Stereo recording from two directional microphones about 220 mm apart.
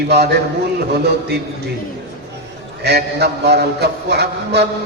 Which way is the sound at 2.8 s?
50° right (ahead or behind).